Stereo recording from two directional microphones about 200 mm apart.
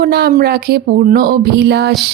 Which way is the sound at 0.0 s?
50° right (ahead or behind).